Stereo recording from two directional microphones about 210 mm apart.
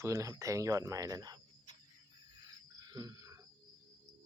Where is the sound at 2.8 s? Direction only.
20° right (ahead or behind).